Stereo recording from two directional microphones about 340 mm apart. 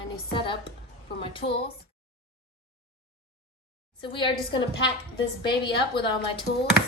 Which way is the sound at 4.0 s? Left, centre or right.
Centre.